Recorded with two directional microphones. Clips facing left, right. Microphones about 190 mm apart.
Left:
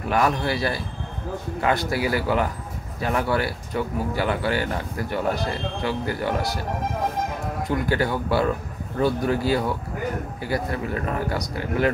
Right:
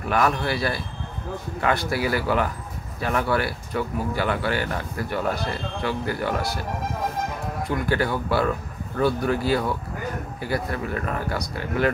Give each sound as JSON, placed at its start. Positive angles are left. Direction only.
{"t": 0.1, "sound": "speech", "side_deg": 15}
{"t": 1.9, "sound": "speech", "side_deg": 15}
{"t": 7.6, "sound": "speech", "side_deg": 15}